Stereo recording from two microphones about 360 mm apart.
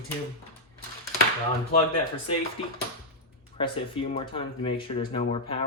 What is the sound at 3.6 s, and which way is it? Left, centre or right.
Speech, centre.